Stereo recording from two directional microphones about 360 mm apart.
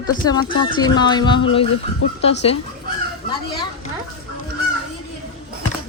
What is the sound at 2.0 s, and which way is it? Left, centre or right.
Speech, left.